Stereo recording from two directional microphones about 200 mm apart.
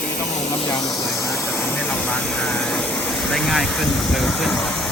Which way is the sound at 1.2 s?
15° left (ahead or behind).